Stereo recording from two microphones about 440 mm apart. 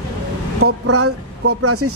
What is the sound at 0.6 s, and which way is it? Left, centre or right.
Speech, right.